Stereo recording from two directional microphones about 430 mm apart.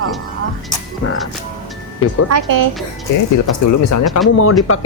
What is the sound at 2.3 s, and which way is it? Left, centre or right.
Speech, right.